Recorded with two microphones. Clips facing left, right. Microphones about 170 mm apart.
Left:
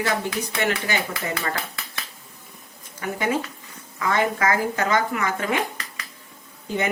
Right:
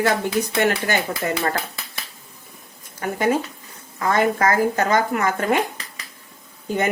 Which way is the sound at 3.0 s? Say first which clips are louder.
Right 4 dB; 40° right (ahead or behind).